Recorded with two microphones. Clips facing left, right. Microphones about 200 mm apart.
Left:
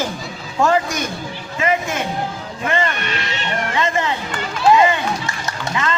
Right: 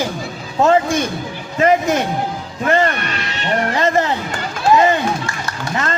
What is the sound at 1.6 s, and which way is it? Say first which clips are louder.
Speech: right 6 dB; 40° right (ahead or behind).